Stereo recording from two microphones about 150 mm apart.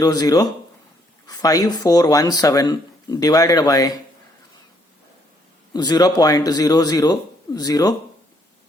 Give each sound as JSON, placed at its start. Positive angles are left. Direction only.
{"t": 0.0, "sound": "speech", "side_deg": 25}
{"t": 5.7, "sound": "speech", "side_deg": 30}